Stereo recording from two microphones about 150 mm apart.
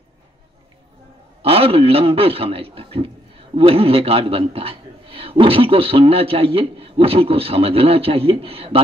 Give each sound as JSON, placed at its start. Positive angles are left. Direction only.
{"t": 1.4, "sound": "a man's voice", "side_deg": -40}